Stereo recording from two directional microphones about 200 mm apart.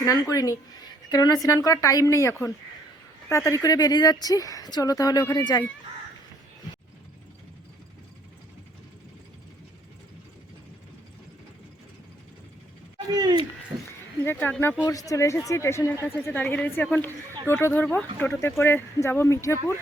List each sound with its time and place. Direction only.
0.0 s a woman's voice: 15° left (ahead or behind)
13.1 s speech: 20° right (ahead or behind)
14.3 s a woman's voice: 10° left (ahead or behind)